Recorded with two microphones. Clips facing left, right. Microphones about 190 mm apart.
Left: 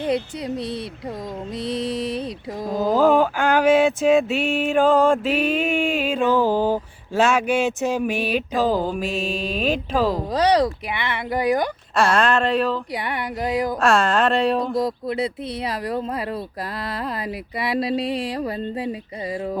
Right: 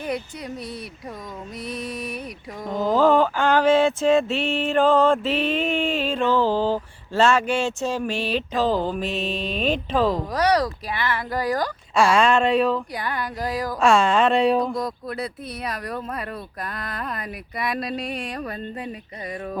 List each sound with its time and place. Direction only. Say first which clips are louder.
0.0 s speech: left 5 dB; 25° left (ahead or behind)
1.5 s speech: left 6 dB; 30° left (ahead or behind)
2.8 s mantra: left 1 dB; 10° left (ahead or behind)
10.3 s speech: left 6 dB; 25° left (ahead or behind)
12.1 s speech: right 1 dB; centre (ahead or behind)
12.9 s speech: left 2 dB; 25° left (ahead or behind)
13.7 s speech: right 3 dB; 5° left (ahead or behind)
14.8 s speech: left 5 dB; 25° left (ahead or behind)